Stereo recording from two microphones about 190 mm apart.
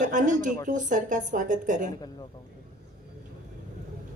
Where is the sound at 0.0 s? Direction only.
40° right (ahead or behind).